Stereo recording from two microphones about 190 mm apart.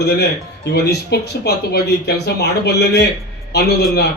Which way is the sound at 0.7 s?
60° left (ahead or behind).